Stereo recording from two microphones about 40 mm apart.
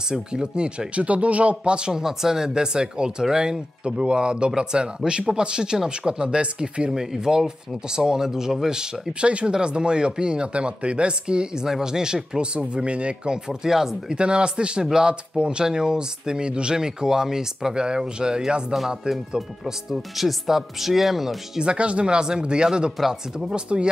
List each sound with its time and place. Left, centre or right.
0.1 s speech: right
6.9 s speech: centre
14.1 s speech: right; by 21.4 s centre
21.5 s speech: right